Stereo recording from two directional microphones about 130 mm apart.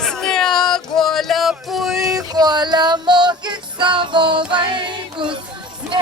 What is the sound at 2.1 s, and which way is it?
Music, 30° right (ahead or behind).